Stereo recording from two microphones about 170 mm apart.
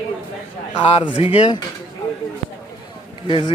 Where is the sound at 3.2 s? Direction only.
30° left (ahead or behind).